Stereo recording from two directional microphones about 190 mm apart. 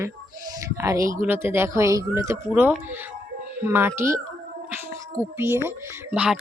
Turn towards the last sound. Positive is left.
turn(degrees=-5)  # may be behind; listen again after turning